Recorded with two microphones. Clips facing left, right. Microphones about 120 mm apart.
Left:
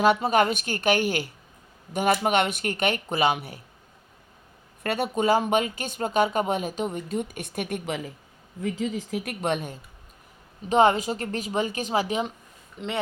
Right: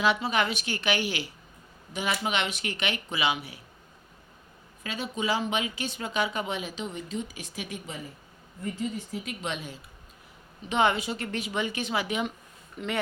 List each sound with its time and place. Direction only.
0.0 s speech: 45° left (ahead or behind)
4.8 s speech: 60° left (ahead or behind)
8.6 s speech: 90° left
9.4 s speech: 50° left (ahead or behind)
10.7 s a woman's voice: 40° left (ahead or behind)
12.8 s speech: 25° left (ahead or behind)